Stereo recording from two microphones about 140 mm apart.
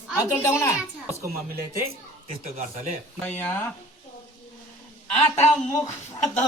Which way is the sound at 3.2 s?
10° left (ahead or behind).